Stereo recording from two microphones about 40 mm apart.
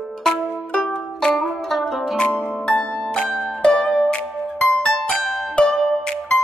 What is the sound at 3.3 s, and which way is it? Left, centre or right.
Music, centre.